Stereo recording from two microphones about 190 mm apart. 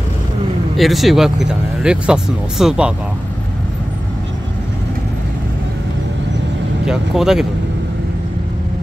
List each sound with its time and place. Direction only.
0.7 s speech: centre (ahead or behind)
6.9 s speech: centre (ahead or behind)